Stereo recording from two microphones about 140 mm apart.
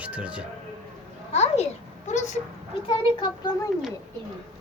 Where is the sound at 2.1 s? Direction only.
60° left (ahead or behind).